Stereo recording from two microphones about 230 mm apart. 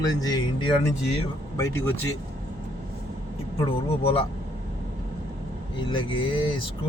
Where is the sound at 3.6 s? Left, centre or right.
Left.